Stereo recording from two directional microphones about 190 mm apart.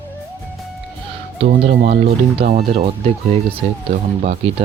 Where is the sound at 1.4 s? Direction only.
55° right (ahead or behind).